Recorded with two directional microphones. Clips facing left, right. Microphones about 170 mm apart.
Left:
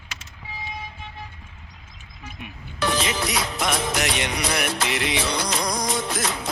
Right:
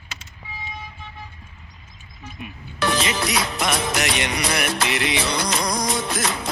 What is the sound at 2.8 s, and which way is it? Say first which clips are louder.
Music: right 2 dB; 80° right.